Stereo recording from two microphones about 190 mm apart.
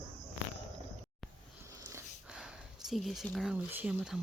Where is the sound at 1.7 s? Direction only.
15° right (ahead or behind).